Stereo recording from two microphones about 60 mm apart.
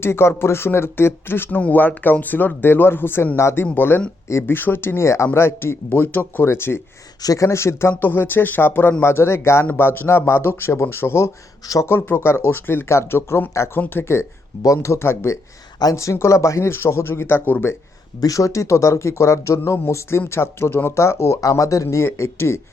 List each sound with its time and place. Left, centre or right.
0.0 s speech: left
1.5 s speech: left
7.2 s speech: left
13.7 s speech: left
14.0 s speech: left
14.6 s speech: left
15.8 s speech: left
18.2 s speech: left